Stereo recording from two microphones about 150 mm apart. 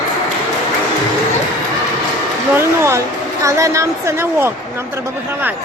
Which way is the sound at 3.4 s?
20° right (ahead or behind).